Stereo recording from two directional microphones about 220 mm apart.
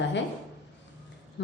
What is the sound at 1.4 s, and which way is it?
Speech, 55° left (ahead or behind).